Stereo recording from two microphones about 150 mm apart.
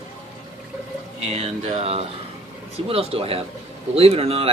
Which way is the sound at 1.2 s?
45° right (ahead or behind).